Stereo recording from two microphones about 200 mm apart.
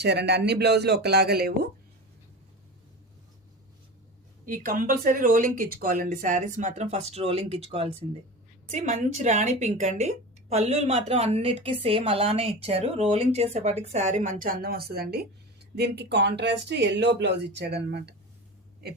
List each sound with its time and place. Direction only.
0.0 s speech: 55° right (ahead or behind)
4.4 s a woman's voice: 45° right (ahead or behind)